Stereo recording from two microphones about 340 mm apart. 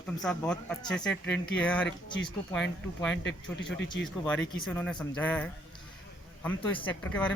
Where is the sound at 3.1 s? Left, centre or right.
Left.